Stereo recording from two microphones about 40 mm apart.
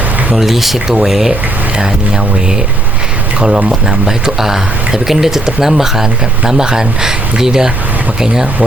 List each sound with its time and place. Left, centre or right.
0.3 s speech: centre
3.7 s speech: centre